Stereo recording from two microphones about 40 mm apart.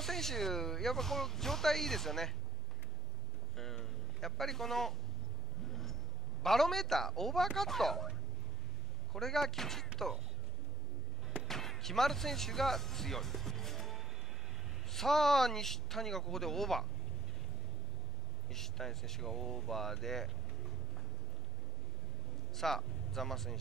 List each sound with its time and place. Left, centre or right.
0.0 s speech: centre
3.5 s a man's voice: centre
5.7 s a sound: centre
6.4 s speech: centre
9.1 s speech: centre
11.4 s speech: centre
18.5 s speech: centre
22.6 s speech: centre